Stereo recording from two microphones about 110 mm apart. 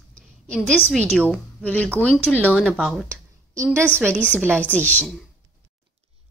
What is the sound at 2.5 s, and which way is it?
Speech, 5° right (ahead or behind).